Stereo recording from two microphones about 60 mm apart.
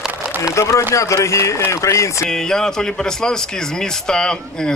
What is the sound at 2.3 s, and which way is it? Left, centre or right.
A man's voice, centre.